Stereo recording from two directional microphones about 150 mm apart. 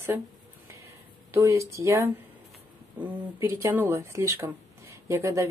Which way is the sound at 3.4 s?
15° right (ahead or behind).